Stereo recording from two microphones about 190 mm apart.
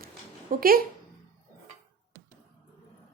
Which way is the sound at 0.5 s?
50° right (ahead or behind).